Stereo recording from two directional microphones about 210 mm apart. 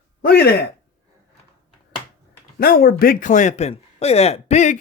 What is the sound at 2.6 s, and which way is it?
Speech, 45° left (ahead or behind).